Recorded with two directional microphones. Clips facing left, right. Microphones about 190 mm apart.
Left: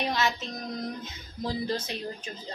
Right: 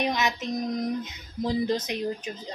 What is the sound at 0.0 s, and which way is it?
Child singing, 15° right (ahead or behind).